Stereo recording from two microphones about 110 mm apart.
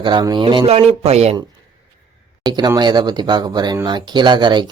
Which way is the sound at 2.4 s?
40° right (ahead or behind).